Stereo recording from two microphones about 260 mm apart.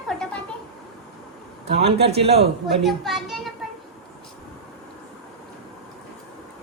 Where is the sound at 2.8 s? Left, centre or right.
Centre.